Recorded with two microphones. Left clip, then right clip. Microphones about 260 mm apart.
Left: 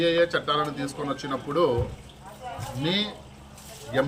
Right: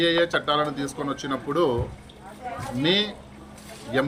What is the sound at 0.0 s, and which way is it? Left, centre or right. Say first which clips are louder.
Speech: right 1 dB; centre.